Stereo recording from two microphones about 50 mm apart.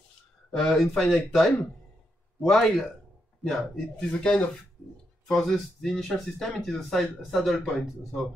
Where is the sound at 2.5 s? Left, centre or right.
Centre.